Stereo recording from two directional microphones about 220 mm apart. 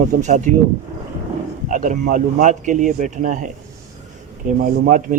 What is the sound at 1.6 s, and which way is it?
Speech, 35° right (ahead or behind).